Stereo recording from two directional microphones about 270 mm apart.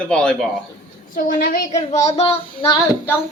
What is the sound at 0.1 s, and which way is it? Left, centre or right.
Speech, centre.